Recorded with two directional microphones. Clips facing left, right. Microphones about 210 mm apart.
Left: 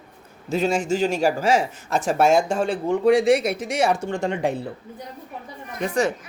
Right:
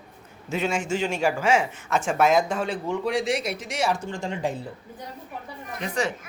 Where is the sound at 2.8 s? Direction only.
50° left (ahead or behind).